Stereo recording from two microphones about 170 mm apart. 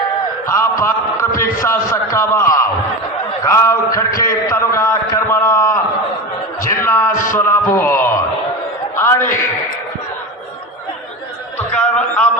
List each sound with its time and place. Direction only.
0.4 s a man's voice: 15° left (ahead or behind)
7.1 s music: 50° left (ahead or behind)
7.3 s a man's voice: 15° left (ahead or behind)
11.7 s a man's voice: 5° left (ahead or behind)